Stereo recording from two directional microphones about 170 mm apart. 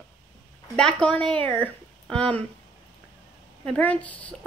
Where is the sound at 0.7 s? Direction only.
5° left (ahead or behind).